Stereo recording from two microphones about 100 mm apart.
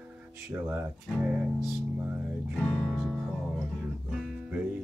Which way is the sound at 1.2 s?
15° right (ahead or behind).